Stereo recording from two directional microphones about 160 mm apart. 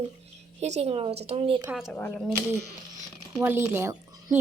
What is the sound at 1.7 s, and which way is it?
Speech, 5° right (ahead or behind).